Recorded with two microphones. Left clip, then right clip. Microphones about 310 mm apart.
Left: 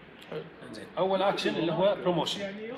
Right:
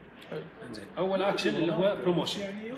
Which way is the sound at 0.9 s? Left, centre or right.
Left.